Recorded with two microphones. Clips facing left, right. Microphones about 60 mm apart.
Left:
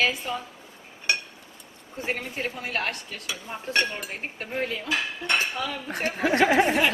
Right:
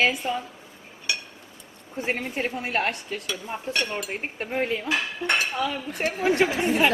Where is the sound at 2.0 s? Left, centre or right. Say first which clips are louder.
Right 2 dB; centre.